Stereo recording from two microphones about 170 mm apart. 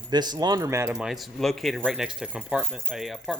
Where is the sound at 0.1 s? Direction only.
25° right (ahead or behind).